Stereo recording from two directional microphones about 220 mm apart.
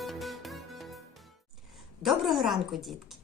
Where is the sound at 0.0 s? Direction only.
Centre (ahead or behind).